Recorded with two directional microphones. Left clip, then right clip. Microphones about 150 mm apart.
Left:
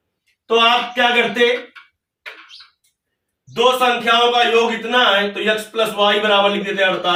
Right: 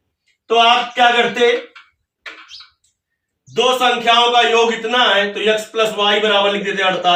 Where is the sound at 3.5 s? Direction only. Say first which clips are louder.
Even; 15° right (ahead or behind).